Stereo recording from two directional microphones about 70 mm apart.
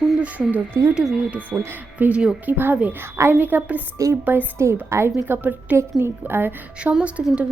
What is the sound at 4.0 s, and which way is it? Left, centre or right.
Speech, right.